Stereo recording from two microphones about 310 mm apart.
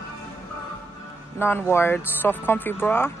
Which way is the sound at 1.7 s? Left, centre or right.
Centre.